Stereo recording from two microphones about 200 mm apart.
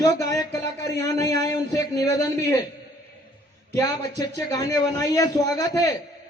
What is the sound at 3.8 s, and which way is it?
A man's voice, 20° left (ahead or behind).